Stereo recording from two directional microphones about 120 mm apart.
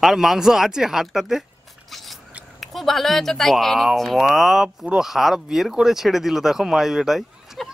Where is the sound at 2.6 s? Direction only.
Centre (ahead or behind).